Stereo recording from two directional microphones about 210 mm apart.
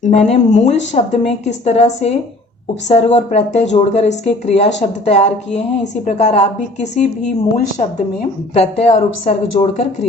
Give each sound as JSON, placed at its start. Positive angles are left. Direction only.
{"t": 0.0, "sound": "a woman's voice", "side_deg": 30}